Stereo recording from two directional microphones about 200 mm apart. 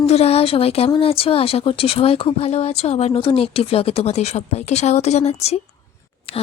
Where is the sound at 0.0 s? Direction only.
30° left (ahead or behind).